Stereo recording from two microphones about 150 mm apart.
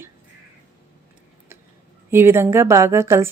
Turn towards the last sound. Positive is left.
turn(degrees=-20)  # may be behind; listen again after turning